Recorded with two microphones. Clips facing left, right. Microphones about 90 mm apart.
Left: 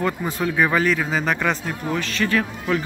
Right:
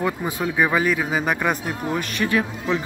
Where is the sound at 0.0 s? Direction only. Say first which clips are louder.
Left 1 dB; 15° right (ahead or behind).